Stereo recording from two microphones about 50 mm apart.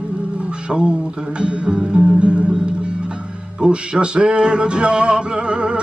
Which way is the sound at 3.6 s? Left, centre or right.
Centre.